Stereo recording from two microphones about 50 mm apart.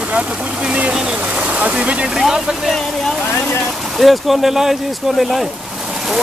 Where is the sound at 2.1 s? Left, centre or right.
Centre.